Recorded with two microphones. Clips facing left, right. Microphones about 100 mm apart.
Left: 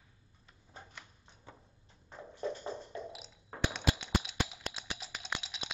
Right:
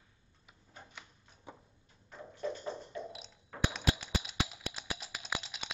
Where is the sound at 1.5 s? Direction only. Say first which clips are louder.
Right 4 dB; 15° right (ahead or behind).